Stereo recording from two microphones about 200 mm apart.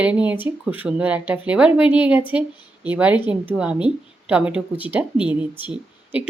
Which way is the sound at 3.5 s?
5° right (ahead or behind).